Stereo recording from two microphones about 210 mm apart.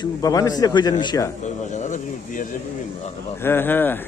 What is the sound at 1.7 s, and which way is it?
Speech, 35° left (ahead or behind).